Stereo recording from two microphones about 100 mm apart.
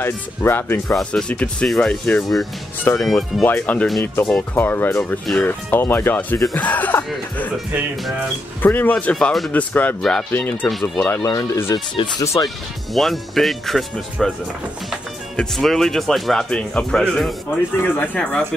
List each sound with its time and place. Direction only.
0.0 s speech: 25° left (ahead or behind)
0.9 s speech: 10° left (ahead or behind)
2.8 s speech: 25° left (ahead or behind)
3.1 s speech: centre (ahead or behind)
3.4 s speech: 15° left (ahead or behind)
8.6 s speech: 20° left (ahead or behind); by 9.5 s 5° left (ahead or behind)
9.5 s speech: 15° left (ahead or behind)
11.2 s speech: 30° left (ahead or behind)
12.9 s speech: centre (ahead or behind)
15.3 s speech: 5° left (ahead or behind)
17.8 s speech: 20° left (ahead or behind)